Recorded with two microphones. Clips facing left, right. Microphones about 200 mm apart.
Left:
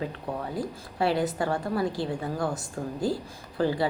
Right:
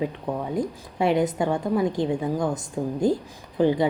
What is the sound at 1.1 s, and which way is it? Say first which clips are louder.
A woman's voice: right 5 dB; 20° right (ahead or behind).